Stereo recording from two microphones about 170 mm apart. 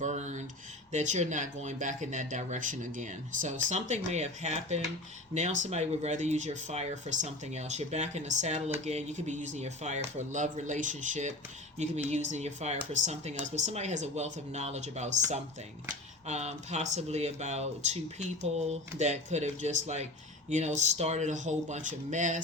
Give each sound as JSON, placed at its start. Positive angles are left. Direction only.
{"t": 0.0, "sound": "a sound", "side_deg": -45}
{"t": 0.9, "sound": "speech", "side_deg": -45}
{"t": 18.7, "sound": "speech", "side_deg": -40}